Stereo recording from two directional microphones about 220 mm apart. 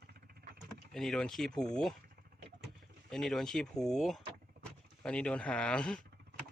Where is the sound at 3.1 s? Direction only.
Centre (ahead or behind).